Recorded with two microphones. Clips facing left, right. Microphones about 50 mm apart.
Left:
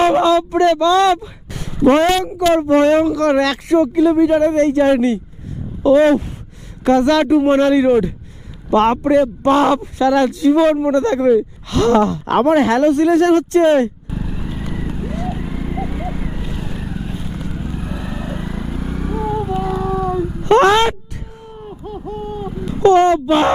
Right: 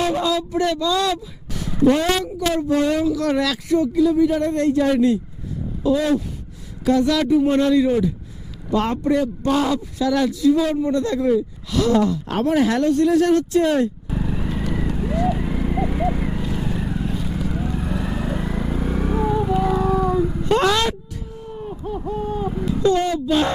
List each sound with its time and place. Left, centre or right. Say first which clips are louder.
0.0 s a man's voice: left 8 dB; left
4.8 s a man's voice: left 4 dB; left
8.7 s a man's voice: left 7 dB; left
12.4 s speech: left 6 dB; left
14.1 s vehicle: right 1 dB; centre
14.7 s horse: right 1 dB; centre
16.4 s vehicle: right 2 dB; centre
20.4 s a sound: left 9 dB; left
22.4 s cat: right 1 dB; centre
22.8 s a man's voice: left 9 dB; left